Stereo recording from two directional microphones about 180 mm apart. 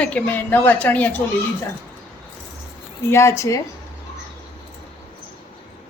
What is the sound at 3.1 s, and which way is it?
Speech, 15° left (ahead or behind).